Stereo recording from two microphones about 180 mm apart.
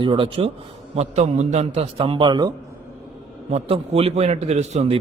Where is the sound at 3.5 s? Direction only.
35° right (ahead or behind).